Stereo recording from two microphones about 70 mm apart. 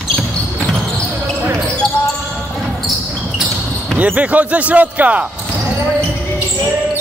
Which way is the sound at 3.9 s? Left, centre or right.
Right.